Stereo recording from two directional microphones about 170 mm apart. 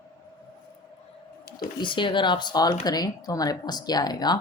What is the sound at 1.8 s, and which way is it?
Speech, 30° left (ahead or behind).